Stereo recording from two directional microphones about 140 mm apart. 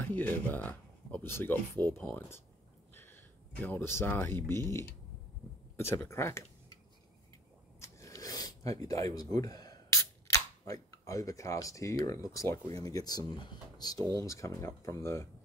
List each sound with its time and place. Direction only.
0.0 s speech: 15° left (ahead or behind)
2.9 s a sound: 15° left (ahead or behind)
3.6 s speech: 15° left (ahead or behind)
7.8 s speech: 20° left (ahead or behind)